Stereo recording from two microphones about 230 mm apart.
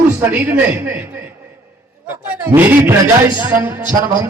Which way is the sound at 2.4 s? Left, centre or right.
Centre.